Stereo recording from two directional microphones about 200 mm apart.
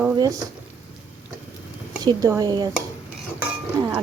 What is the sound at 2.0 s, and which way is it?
Speech, 20° right (ahead or behind).